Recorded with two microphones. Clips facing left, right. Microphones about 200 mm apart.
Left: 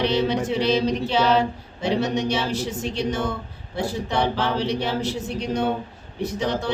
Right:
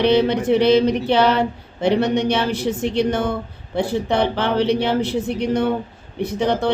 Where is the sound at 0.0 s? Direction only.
60° right (ahead or behind).